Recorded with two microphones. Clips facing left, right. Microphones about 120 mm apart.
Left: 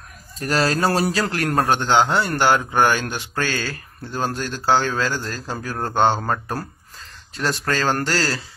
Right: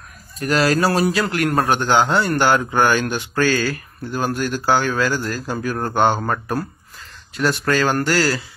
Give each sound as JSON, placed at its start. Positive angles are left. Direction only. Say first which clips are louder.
{"t": 0.4, "sound": "speech", "louder": "right 3 dB", "side_deg": 30}
{"t": 1.5, "sound": "a man's voice", "louder": "left 1 dB", "side_deg": 0}
{"t": 1.8, "sound": "speech", "louder": "right 1 dB", "side_deg": 20}